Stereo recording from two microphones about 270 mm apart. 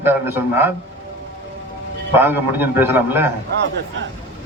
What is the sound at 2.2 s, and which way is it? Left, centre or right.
A man's voice, centre.